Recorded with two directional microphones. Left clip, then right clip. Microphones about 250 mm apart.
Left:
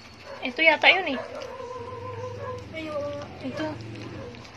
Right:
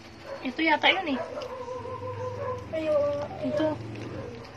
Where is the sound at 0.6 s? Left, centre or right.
Left.